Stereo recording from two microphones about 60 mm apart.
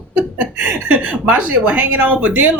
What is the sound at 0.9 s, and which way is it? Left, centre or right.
A woman's voice, right.